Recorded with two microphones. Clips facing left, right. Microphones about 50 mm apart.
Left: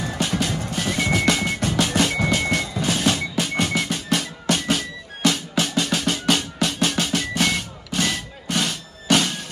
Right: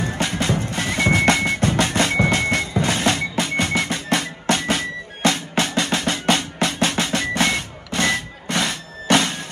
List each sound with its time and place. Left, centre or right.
0.0 s music: right